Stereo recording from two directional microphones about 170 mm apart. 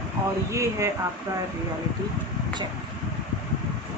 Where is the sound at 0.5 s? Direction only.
20° right (ahead or behind).